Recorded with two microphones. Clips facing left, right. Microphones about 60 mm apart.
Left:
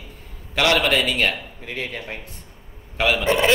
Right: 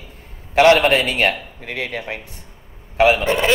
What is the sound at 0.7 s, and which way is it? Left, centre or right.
A man's voice, right.